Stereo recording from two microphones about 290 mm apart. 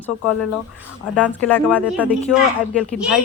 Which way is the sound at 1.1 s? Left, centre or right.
Centre.